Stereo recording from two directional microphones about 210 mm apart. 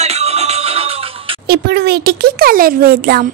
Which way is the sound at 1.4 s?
50° right (ahead or behind).